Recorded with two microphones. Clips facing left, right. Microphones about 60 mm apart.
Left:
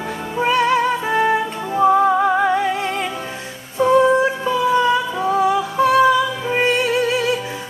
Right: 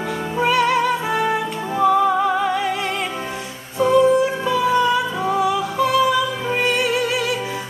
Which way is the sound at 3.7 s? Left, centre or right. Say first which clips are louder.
Left 1 dB; left.